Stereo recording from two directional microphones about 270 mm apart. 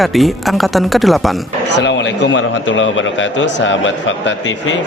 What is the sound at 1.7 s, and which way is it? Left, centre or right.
A man's voice, left.